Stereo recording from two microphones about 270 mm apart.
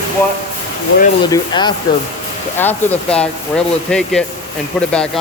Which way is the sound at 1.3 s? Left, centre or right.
Centre.